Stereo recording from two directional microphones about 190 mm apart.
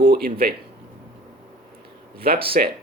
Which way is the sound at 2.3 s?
55° right (ahead or behind).